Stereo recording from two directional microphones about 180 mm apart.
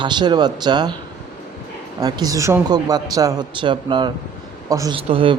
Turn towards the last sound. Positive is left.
turn(degrees=-30)  # may be behind; listen again after turning